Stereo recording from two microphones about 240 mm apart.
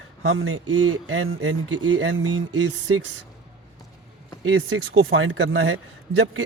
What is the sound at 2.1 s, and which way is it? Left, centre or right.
Speech, right.